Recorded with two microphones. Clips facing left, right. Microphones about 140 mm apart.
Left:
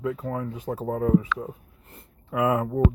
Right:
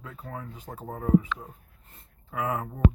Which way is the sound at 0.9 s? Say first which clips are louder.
Left 1 dB; 80° left.